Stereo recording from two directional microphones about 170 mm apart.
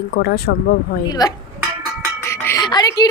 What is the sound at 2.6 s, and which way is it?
Speech, 25° left (ahead or behind).